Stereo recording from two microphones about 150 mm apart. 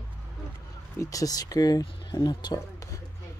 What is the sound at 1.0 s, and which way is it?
Speech, 20° left (ahead or behind).